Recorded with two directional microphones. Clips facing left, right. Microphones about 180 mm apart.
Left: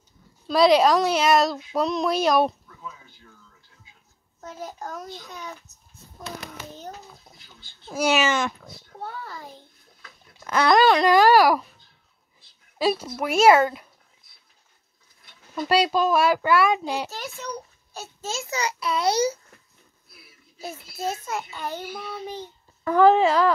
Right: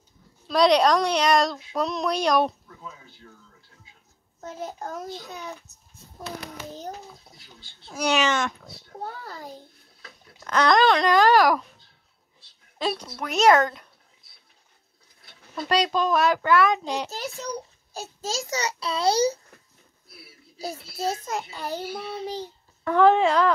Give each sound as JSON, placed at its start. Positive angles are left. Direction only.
{"t": 0.5, "sound": "a woman's voice", "side_deg": 5}
{"t": 2.8, "sound": "a sound", "side_deg": -40}
{"t": 4.4, "sound": "a child's voice", "side_deg": -30}
{"t": 7.9, "sound": "a woman's voice", "side_deg": 5}
{"t": 8.9, "sound": "a child's voice", "side_deg": -40}
{"t": 10.4, "sound": "a child's voice", "side_deg": 10}
{"t": 12.7, "sound": "a child's voice", "side_deg": 5}
{"t": 15.5, "sound": "a child's voice", "side_deg": 5}
{"t": 17.1, "sound": "a child's voice", "side_deg": -35}
{"t": 20.5, "sound": "a child's voice", "side_deg": -35}
{"t": 22.8, "sound": "a woman's voice", "side_deg": 0}